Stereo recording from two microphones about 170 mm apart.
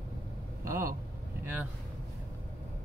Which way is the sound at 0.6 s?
55° right (ahead or behind).